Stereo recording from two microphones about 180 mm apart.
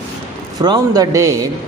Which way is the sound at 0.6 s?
20° right (ahead or behind).